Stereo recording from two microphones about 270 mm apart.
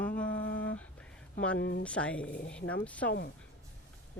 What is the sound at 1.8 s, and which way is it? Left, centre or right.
Speech, centre.